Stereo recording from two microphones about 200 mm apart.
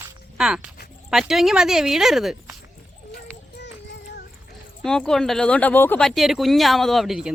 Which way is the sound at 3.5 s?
60° left (ahead or behind).